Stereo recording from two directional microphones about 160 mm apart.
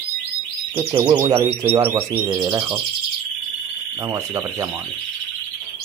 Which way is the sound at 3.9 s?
20° right (ahead or behind).